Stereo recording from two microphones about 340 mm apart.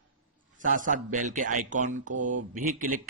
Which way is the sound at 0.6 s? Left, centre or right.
Right.